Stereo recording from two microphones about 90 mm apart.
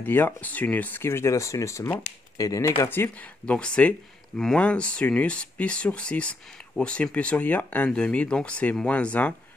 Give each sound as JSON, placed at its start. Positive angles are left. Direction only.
{"t": 0.0, "sound": "speech", "side_deg": 20}
{"t": 2.8, "sound": "speech", "side_deg": 25}
{"t": 3.4, "sound": "speech", "side_deg": 10}